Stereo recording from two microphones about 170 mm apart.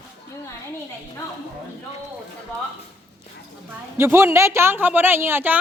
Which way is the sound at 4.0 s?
15° right (ahead or behind).